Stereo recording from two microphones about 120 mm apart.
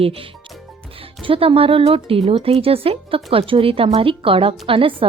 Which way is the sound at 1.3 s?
50° right (ahead or behind).